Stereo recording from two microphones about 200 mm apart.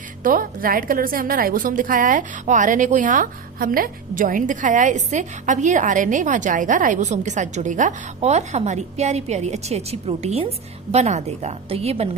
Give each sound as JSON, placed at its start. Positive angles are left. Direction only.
{"t": 0.2, "sound": "a woman's voice", "side_deg": -45}